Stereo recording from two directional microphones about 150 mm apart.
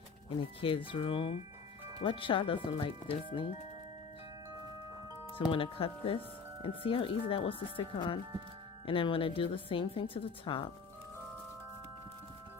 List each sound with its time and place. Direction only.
0.3 s a woman's voice: 35° left (ahead or behind)
5.5 s a woman's voice: 35° left (ahead or behind)